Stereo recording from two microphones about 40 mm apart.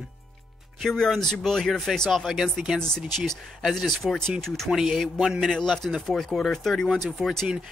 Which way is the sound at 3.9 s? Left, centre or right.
Centre.